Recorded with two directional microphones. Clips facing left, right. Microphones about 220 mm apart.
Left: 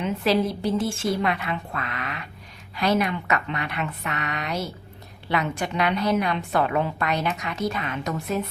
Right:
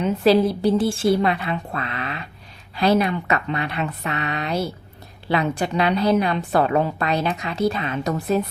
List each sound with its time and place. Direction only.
0.0 s a woman's voice: 35° right (ahead or behind)